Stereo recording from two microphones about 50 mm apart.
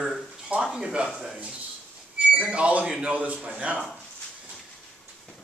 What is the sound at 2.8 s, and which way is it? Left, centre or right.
Speech, centre.